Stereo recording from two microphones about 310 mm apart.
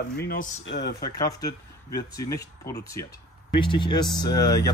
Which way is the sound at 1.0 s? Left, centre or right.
Centre.